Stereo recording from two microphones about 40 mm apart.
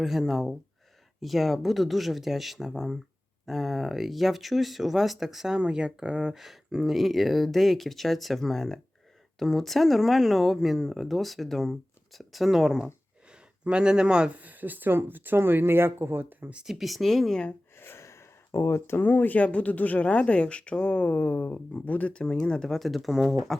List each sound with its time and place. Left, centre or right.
0.0 s speech: centre
3.4 s speech: centre
5.7 s speech: right
6.3 s speech: centre
13.3 s speech: right
14.3 s speech: right
16.6 s speech: centre
17.7 s a sound: left
19.0 s speech: left
19.4 s speech: left
22.2 s speech: left
22.8 s speech: centre